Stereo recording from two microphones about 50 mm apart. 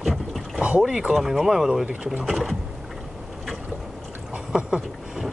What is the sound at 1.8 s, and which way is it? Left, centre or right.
Speech, right.